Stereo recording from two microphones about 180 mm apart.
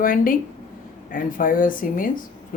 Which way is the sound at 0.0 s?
50° left (ahead or behind).